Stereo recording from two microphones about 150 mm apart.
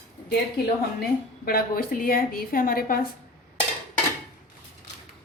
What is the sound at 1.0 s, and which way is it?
A woman's voice, 80° left.